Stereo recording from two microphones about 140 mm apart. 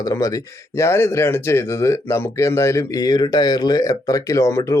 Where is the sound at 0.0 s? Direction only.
25° left (ahead or behind).